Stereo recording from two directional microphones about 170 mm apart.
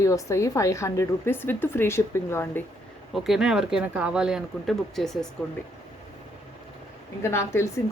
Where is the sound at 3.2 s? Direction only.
Centre (ahead or behind).